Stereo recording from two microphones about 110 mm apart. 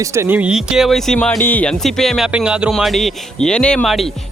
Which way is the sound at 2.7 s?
Centre (ahead or behind).